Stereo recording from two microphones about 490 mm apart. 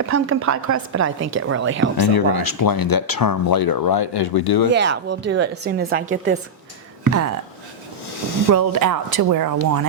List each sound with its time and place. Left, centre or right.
0.0 s a woman's voice: right
2.0 s speech: left
4.7 s a woman's voice: right
7.0 s a sound: right
8.4 s speech: right